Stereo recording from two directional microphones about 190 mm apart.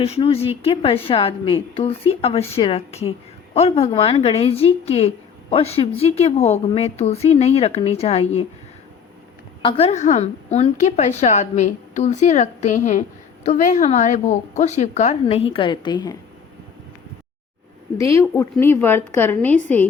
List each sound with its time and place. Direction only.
0.0 s a woman's voice: 30° left (ahead or behind)
9.6 s a woman's voice: 30° left (ahead or behind)
17.9 s a woman's voice: 15° left (ahead or behind)